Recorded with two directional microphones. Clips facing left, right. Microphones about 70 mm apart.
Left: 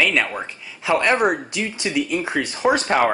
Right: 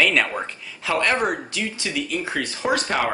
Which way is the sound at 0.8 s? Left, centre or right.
Centre.